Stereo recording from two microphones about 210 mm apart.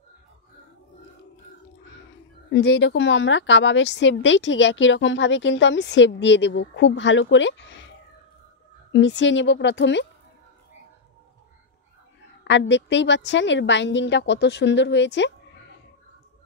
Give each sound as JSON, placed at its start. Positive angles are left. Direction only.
{"t": 2.5, "sound": "a woman's voice", "side_deg": 55}
{"t": 8.9, "sound": "a woman's voice", "side_deg": 60}
{"t": 12.4, "sound": "a woman's voice", "side_deg": 60}